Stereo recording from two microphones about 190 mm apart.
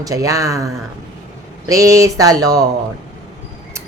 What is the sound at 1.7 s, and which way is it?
Speech, 15° right (ahead or behind).